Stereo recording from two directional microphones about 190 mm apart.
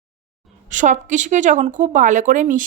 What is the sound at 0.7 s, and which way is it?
Speech, 40° right (ahead or behind).